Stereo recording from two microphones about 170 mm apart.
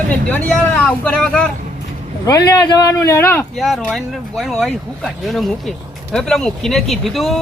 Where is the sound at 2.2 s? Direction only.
20° left (ahead or behind).